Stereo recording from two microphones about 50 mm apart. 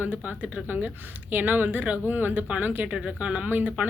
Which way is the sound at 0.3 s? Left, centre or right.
Right.